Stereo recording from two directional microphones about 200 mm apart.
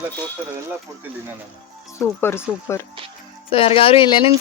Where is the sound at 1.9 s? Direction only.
10° left (ahead or behind).